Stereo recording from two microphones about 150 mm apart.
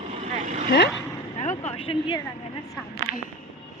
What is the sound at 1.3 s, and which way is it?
Speech, 45° left (ahead or behind).